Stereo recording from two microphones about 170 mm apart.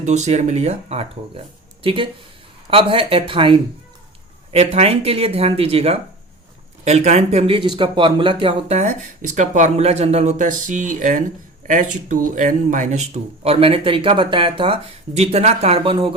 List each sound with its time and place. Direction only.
0.0 s speech: 40° right (ahead or behind)